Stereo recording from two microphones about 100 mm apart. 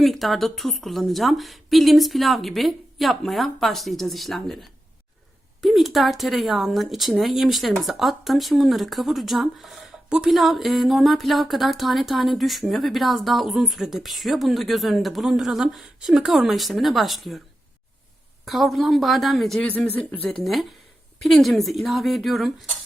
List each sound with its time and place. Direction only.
0.0 s speech: centre (ahead or behind)
18.4 s speech: centre (ahead or behind)
19.6 s speech: 15° left (ahead or behind)
20.4 s speech: centre (ahead or behind)